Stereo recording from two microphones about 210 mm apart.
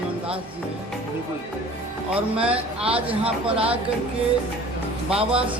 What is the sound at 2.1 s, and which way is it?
Speech, 5° right (ahead or behind).